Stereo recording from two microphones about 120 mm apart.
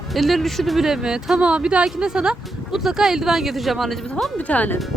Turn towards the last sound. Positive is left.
turn(degrees=10)  # may be behind; listen again after turning